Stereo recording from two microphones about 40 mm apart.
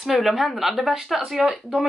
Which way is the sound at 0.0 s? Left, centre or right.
Centre.